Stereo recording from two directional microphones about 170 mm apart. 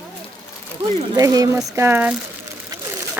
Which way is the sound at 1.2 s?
20° right (ahead or behind).